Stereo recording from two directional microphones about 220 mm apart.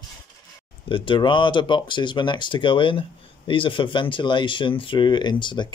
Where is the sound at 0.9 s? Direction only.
25° left (ahead or behind).